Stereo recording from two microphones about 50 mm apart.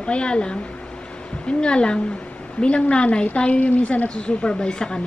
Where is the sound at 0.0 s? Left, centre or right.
Left.